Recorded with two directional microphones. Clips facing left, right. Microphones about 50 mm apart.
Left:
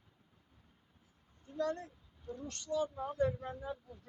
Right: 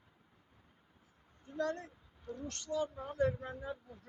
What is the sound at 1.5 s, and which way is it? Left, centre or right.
Speech, right.